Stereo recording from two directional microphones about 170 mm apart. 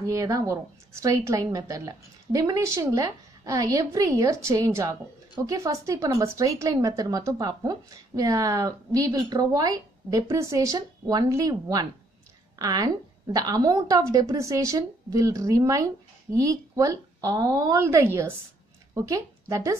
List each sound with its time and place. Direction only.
0.0 s speech: 20° right (ahead or behind)